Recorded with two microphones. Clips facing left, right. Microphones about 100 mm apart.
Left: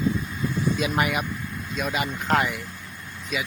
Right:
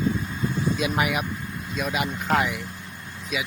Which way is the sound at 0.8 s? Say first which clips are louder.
Even; centre (ahead or behind).